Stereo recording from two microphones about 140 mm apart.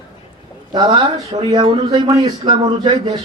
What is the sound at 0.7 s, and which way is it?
Speech, 30° right (ahead or behind).